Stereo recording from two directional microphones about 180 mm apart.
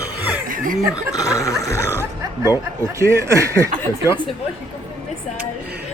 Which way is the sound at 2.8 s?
15° right (ahead or behind).